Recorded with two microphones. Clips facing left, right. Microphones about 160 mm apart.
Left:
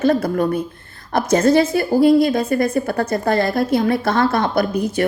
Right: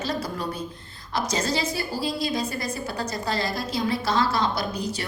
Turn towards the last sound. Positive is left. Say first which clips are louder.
# left 10 dB
turn(degrees=55)  # may be behind; listen again after turning